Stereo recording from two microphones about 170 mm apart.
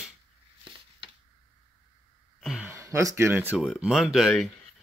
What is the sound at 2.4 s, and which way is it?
Speech, 5° right (ahead or behind).